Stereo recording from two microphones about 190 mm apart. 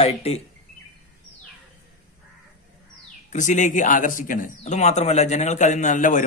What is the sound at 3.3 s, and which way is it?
A man's voice, 40° left (ahead or behind).